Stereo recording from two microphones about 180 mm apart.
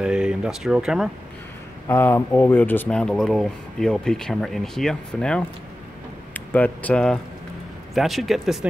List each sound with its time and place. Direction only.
0.0 s speech: 5° right (ahead or behind)
1.9 s speech: 15° left (ahead or behind)